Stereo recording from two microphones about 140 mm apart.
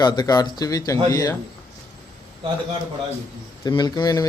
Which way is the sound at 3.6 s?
30° left (ahead or behind).